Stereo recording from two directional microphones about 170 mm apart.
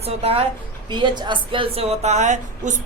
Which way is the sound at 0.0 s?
35° right (ahead or behind).